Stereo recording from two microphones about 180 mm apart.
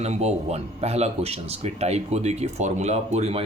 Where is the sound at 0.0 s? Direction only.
35° right (ahead or behind).